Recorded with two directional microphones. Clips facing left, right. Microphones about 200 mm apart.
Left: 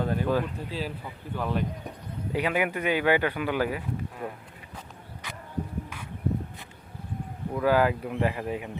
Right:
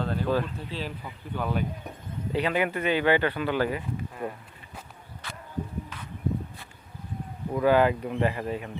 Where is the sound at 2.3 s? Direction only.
10° left (ahead or behind).